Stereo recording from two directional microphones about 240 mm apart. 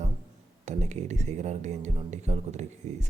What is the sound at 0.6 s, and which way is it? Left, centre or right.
Speech, right.